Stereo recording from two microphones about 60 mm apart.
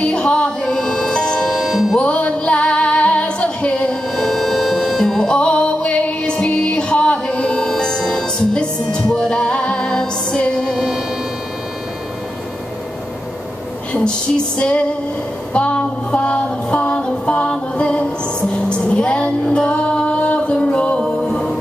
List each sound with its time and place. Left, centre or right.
0.0 s music: centre
1.5 s music: centre
2.0 s female singing: left
4.1 s music: centre
5.4 s music: centre
7.6 s music: centre
13.9 s music: centre
15.5 s a sound: centre
17.0 s music: centre
18.7 s female singing: centre
21.0 s music: centre